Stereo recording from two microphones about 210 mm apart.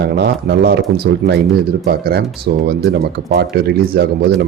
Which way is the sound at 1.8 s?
45° right (ahead or behind).